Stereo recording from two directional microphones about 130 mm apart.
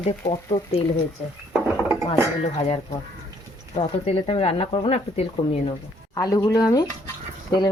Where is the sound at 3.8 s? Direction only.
50° left (ahead or behind).